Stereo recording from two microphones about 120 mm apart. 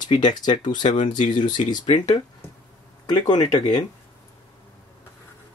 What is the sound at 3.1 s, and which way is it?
Speech, 35° left (ahead or behind).